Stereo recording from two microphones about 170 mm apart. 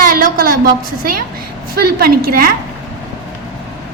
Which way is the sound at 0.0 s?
55° right (ahead or behind).